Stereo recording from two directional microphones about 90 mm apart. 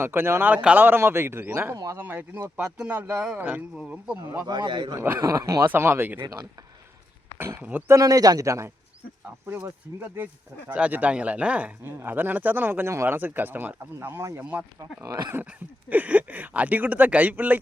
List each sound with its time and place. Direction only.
0.0 s a man's voice: 25° right (ahead or behind)
1.7 s a man's voice: 40° right (ahead or behind)
2.0 s a man's voice: 20° right (ahead or behind)
2.6 s speech: 10° right (ahead or behind)
4.4 s a man's voice: 60° right (ahead or behind)
4.9 s a man's voice: 25° right (ahead or behind)
5.2 s a man's voice: 40° right (ahead or behind)
5.7 s a man's voice: 25° right (ahead or behind)
6.2 s speech: 50° right (ahead or behind)
7.3 s a man's voice: 25° right (ahead or behind)
7.9 s a man's voice: 40° right (ahead or behind); by 17.6 s 20° right (ahead or behind)